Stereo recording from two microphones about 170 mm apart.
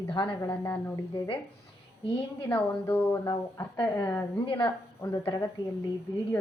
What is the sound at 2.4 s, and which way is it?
Speech, 10° left (ahead or behind).